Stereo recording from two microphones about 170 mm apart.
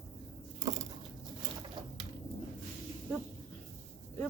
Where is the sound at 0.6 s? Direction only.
20° right (ahead or behind).